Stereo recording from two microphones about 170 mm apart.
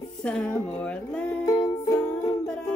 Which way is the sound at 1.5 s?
20° left (ahead or behind).